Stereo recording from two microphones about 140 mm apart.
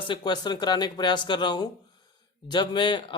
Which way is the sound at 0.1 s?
30° left (ahead or behind).